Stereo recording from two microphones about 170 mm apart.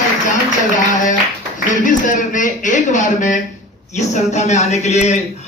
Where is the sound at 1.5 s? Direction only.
50° left (ahead or behind).